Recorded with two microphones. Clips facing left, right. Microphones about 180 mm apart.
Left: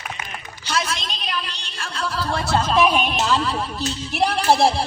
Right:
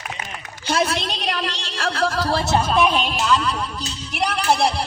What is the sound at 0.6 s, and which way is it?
A woman's voice, 55° right (ahead or behind).